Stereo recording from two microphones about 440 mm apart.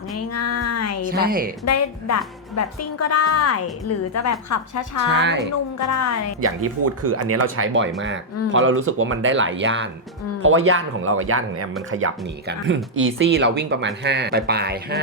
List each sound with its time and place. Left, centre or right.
0.3 s a sound: left
1.1 s speech: centre
1.6 s a woman's voice: left
5.0 s speech: right
5.9 s a woman's voice: left
6.4 s speech: right